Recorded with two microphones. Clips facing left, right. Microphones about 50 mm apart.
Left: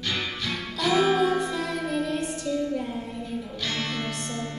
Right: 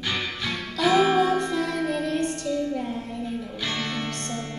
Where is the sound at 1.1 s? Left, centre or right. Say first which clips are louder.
Right 2 dB; centre.